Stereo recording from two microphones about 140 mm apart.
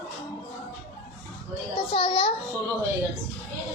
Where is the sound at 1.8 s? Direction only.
40° left (ahead or behind).